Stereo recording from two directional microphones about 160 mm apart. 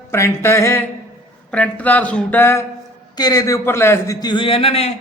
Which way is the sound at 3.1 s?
25° left (ahead or behind).